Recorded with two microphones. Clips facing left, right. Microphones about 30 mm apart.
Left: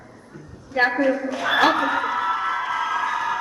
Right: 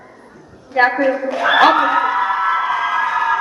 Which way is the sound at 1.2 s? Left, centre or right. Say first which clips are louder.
Right 10 dB; right.